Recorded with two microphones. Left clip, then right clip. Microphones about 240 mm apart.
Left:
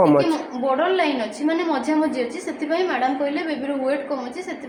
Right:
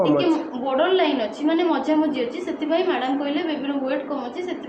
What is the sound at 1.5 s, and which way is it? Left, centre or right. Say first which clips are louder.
A woman's voice: right 1 dB; centre.